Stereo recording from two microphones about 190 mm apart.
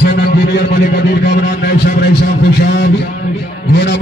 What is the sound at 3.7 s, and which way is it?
Speech, 65° left (ahead or behind).